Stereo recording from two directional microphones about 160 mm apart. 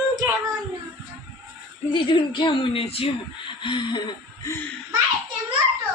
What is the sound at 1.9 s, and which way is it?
Speech, 30° left (ahead or behind).